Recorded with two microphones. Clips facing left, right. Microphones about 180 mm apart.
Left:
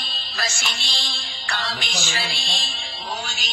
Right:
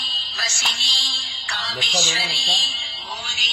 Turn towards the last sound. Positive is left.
turn(degrees=45)  # may be behind; listen again after turning